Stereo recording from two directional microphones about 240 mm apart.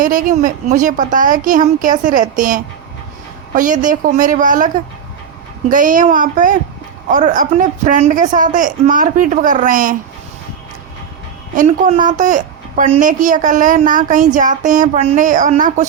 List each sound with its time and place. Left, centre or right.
0.0 s a woman's voice: right
5.7 s a woman's voice: right
11.5 s a woman's voice: right